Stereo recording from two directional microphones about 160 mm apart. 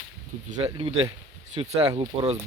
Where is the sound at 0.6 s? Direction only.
40° right (ahead or behind).